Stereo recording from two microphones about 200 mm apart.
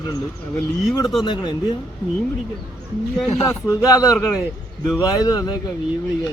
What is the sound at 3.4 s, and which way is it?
Speech, 15° left (ahead or behind).